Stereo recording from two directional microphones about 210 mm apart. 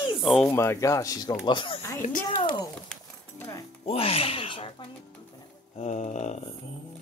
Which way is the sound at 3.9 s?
30° left (ahead or behind).